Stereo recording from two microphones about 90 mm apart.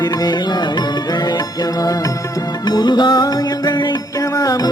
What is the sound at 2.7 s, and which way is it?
Music, 55° left (ahead or behind).